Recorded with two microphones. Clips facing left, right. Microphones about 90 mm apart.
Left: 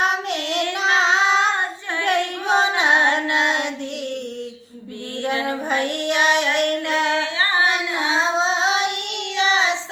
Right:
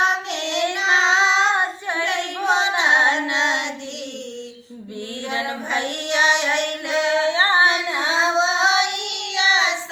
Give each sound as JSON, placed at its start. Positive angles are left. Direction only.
{"t": 0.0, "sound": "child singing", "side_deg": 50}
{"t": 2.7, "sound": "female singing", "side_deg": 50}
{"t": 5.2, "sound": "child singing", "side_deg": 45}
{"t": 7.3, "sound": "female singing", "side_deg": -25}
{"t": 8.1, "sound": "child singing", "side_deg": 45}